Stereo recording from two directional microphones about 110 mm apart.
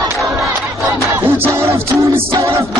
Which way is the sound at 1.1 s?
25° right (ahead or behind).